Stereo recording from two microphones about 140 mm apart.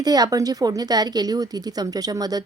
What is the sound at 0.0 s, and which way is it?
A woman's voice, 30° right (ahead or behind).